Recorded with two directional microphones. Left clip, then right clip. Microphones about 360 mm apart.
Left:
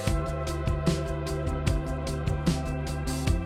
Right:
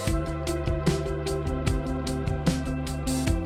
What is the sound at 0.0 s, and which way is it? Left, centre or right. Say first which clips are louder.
Music: right 1 dB; centre.